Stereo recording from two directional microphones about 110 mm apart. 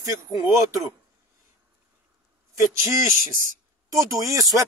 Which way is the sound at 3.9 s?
30° right (ahead or behind).